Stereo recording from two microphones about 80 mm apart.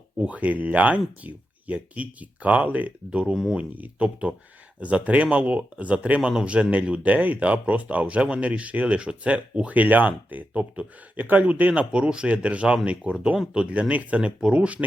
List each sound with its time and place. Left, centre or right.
0.2 s speech: centre